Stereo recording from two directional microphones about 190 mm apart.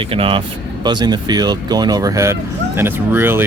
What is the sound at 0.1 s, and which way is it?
Speech, 30° right (ahead or behind).